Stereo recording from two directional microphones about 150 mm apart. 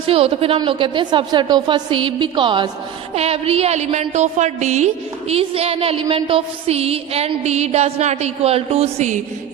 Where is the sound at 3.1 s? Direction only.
40° right (ahead or behind).